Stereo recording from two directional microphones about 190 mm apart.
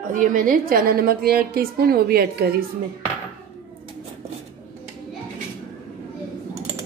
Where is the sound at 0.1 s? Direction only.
45° right (ahead or behind).